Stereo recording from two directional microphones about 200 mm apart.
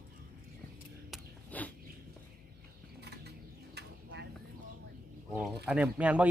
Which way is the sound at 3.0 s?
55° right (ahead or behind).